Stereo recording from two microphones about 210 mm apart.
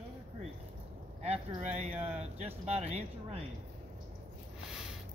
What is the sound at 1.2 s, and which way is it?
Speech, 30° right (ahead or behind).